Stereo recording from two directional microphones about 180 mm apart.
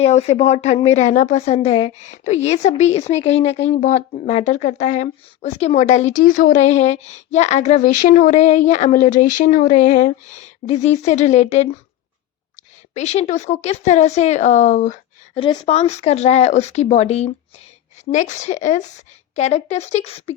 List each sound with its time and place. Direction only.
0.0 s a woman's voice: 35° left (ahead or behind)
12.9 s a woman's voice: 40° left (ahead or behind)
15.4 s a woman's voice: 30° left (ahead or behind)